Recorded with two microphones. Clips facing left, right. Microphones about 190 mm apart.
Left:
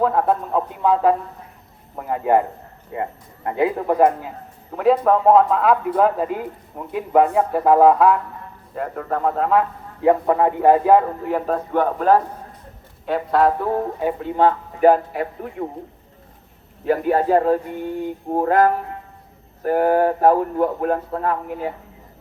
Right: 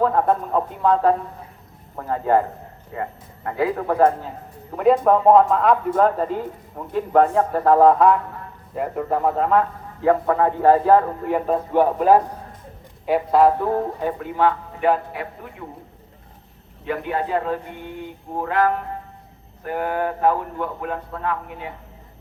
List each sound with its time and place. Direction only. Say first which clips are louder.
0.0 s a man's voice: even; 5° left (ahead or behind)
4.8 s a man's voice: even; centre (ahead or behind)
10.0 s a man's voice: left 2 dB; 20° left (ahead or behind)
11.3 s a man's voice: right 1 dB; centre (ahead or behind)
11.7 s a man's voice: right 1 dB; 10° right (ahead or behind)
14.3 s a man's voice: left 2 dB; 40° left (ahead or behind)
16.8 s a man's voice: left 7 dB; 40° left (ahead or behind)